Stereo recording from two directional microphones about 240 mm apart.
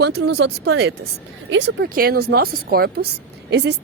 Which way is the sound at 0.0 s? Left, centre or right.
Right.